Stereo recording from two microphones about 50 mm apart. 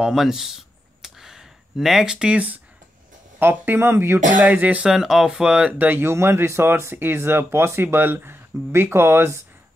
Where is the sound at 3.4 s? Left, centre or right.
Right.